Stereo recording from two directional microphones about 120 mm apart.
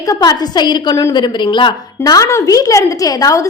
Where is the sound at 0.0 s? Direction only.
30° left (ahead or behind).